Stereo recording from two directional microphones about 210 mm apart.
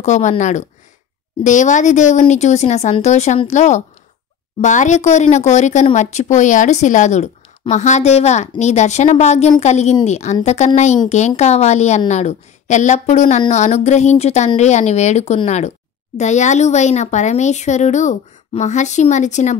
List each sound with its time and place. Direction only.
0.0 s speech: 35° left (ahead or behind)